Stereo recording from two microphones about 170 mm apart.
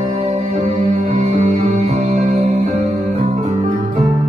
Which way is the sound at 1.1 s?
40° right (ahead or behind).